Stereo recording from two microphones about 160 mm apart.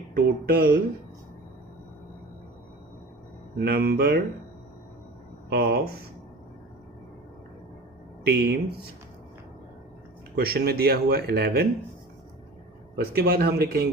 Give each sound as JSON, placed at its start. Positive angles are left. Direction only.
{"t": 0.1, "sound": "speech", "side_deg": -70}
{"t": 3.6, "sound": "speech", "side_deg": -80}
{"t": 5.5, "sound": "speech", "side_deg": -80}
{"t": 8.2, "sound": "speech", "side_deg": -90}
{"t": 10.3, "sound": "speech", "side_deg": -75}
{"t": 13.0, "sound": "speech", "side_deg": -75}